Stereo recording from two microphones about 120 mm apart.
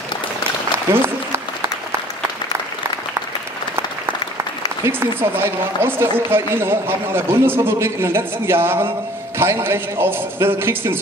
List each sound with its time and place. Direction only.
0.9 s applause: 20° right (ahead or behind)
4.8 s speech: 20° right (ahead or behind)